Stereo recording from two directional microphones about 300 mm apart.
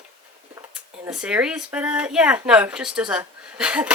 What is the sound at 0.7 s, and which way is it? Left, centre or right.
Speech, centre.